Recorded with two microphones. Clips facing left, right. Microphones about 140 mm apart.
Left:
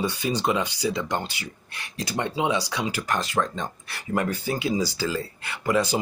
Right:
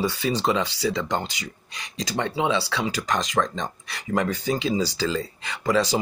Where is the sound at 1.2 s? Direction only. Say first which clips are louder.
Right 1 dB; 15° right (ahead or behind).